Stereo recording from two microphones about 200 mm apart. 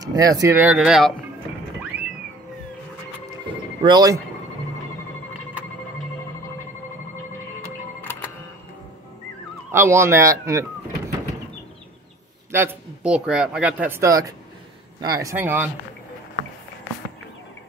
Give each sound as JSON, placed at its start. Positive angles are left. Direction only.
{"t": 0.0, "sound": "speech", "side_deg": -20}
{"t": 3.8, "sound": "speech", "side_deg": -20}
{"t": 8.0, "sound": "music", "side_deg": 10}
{"t": 9.7, "sound": "speech", "side_deg": -15}
{"t": 12.4, "sound": "speech", "side_deg": -10}